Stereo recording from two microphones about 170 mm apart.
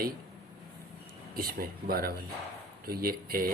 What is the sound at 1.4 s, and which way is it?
Speech, 60° right (ahead or behind).